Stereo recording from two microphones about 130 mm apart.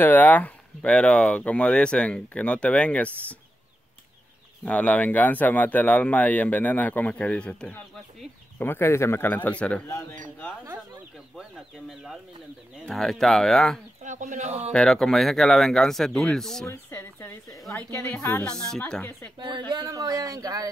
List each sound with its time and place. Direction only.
0.0 s speech: 15° left (ahead or behind)
4.6 s speech: 10° left (ahead or behind)
11.3 s speech: 5° right (ahead or behind)
14.0 s speech: 70° right (ahead or behind); by 14.7 s 55° right (ahead or behind)
14.7 s speech: 5° left (ahead or behind)
16.6 s a woman's voice: 20° left (ahead or behind)
18.4 s speech: 5° left (ahead or behind)
19.3 s a sound: 35° right (ahead or behind)